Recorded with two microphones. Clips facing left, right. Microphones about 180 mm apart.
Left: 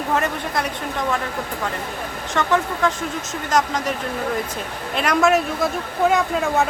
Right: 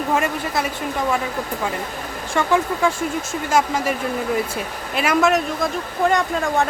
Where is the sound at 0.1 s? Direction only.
5° right (ahead or behind).